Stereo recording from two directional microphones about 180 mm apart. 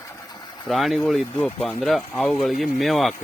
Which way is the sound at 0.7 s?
Centre (ahead or behind).